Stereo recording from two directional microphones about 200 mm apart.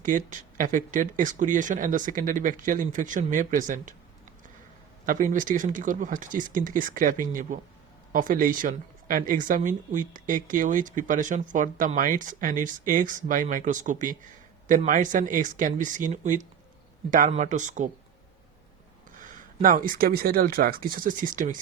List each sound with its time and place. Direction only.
0.0 s speech: 40° right (ahead or behind)
5.0 s speech: 40° right (ahead or behind)
19.1 s speech: 40° right (ahead or behind)